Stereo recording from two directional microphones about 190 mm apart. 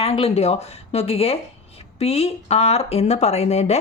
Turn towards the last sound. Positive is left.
turn(degrees=35)  # may be behind; listen again after turning